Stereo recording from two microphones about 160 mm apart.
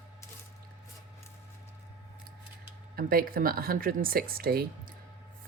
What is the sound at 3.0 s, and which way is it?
Speech, 65° right (ahead or behind).